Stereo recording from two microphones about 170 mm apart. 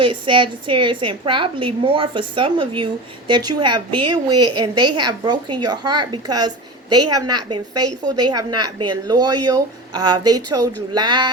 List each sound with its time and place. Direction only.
0.0 s a woman's voice: 30° right (ahead or behind)